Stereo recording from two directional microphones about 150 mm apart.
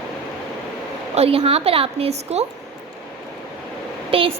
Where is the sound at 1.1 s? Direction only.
40° right (ahead or behind).